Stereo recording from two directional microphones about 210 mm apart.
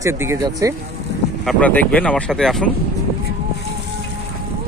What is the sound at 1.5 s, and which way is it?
Speech, 5° left (ahead or behind).